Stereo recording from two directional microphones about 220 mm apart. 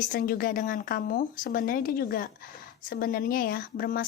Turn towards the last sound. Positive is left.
turn(degrees=40)  # may be behind; listen again after turning